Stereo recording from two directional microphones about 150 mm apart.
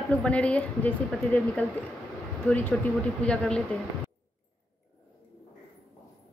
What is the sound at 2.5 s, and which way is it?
A woman's voice, 10° left (ahead or behind).